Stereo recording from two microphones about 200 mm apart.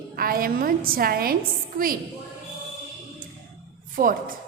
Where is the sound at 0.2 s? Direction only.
45° right (ahead or behind).